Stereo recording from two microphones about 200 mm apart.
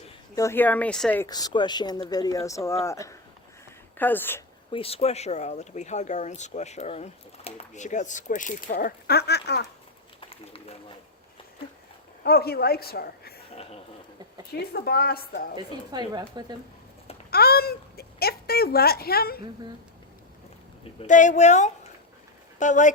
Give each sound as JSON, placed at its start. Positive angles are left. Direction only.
{"t": 0.3, "sound": "speech", "side_deg": 10}
{"t": 1.3, "sound": "speech", "side_deg": 20}
{"t": 4.7, "sound": "speech", "side_deg": 30}
{"t": 10.2, "sound": "run", "side_deg": 30}
{"t": 12.2, "sound": "a woman's voice", "side_deg": 50}
{"t": 14.7, "sound": "a woman's voice", "side_deg": 50}
{"t": 15.5, "sound": "speech", "side_deg": -20}
{"t": 17.3, "sound": "a woman's voice", "side_deg": 50}
{"t": 21.0, "sound": "speech", "side_deg": 40}